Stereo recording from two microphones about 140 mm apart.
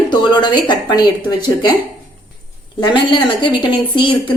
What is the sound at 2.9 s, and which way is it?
Speech, 35° left (ahead or behind).